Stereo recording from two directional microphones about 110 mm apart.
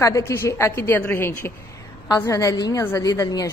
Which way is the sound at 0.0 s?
25° left (ahead or behind).